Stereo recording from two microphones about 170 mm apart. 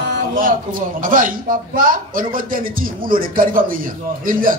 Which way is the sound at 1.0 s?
55° right (ahead or behind).